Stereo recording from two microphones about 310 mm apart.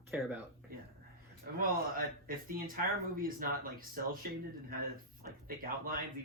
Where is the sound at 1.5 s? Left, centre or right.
Right.